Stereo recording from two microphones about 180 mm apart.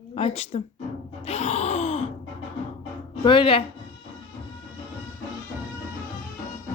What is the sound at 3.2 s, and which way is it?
Speech, 30° left (ahead or behind).